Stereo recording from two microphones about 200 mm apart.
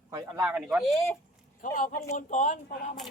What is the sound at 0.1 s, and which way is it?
Speech, 15° right (ahead or behind).